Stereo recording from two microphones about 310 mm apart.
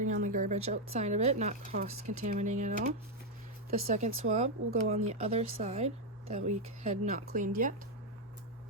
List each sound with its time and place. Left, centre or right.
0.0 s speech: right